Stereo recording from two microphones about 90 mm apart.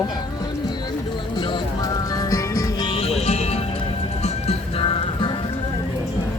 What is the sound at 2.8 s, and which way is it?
Music, 80° left.